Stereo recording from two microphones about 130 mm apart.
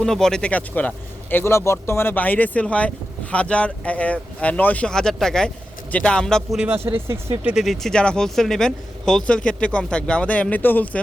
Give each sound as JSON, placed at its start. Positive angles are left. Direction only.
{"t": 0.0, "sound": "speech", "side_deg": 5}
{"t": 6.7, "sound": "speech", "side_deg": -15}
{"t": 7.5, "sound": "speech", "side_deg": 0}